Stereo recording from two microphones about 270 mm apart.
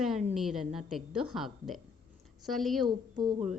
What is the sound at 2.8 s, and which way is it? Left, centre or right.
Speech, centre.